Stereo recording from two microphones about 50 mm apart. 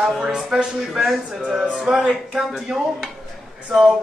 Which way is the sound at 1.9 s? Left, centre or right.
Centre.